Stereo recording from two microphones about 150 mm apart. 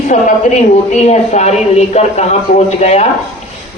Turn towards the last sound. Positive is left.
turn(degrees=50)  # may be behind; listen again after turning